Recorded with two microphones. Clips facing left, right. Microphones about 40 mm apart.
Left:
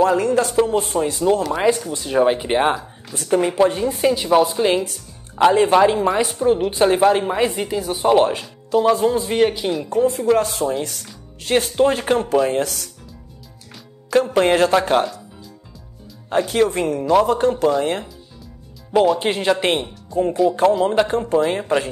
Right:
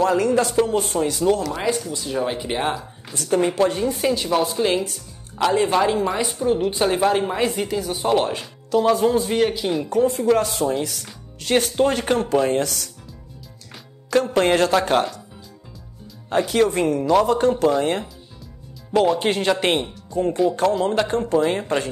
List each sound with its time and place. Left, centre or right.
0.0 s speech: centre; by 2.7 s left
3.3 s speech: centre; by 5.5 s left
6.0 s speech: centre
14.1 s speech: centre
16.3 s speech: centre
19.1 s speech: centre